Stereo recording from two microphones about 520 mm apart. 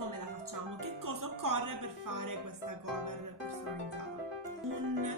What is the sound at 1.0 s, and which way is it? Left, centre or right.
A woman's voice, right.